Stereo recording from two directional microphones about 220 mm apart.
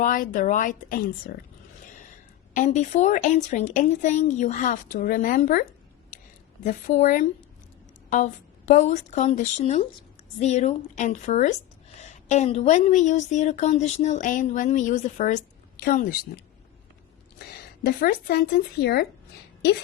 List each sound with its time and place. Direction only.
0.0 s a woman's voice: 40° left (ahead or behind)
6.7 s a woman's voice: 35° left (ahead or behind)
17.8 s speech: 45° left (ahead or behind)